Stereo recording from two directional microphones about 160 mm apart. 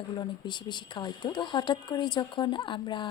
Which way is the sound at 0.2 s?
30° left (ahead or behind).